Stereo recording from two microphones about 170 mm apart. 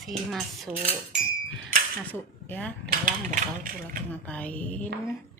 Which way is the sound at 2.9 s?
50° right (ahead or behind).